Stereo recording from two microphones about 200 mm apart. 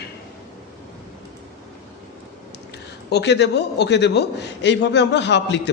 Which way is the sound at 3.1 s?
60° left (ahead or behind).